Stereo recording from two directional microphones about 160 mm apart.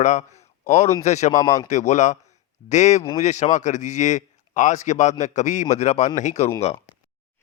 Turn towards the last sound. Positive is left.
turn(degrees=45)  # may be behind; listen again after turning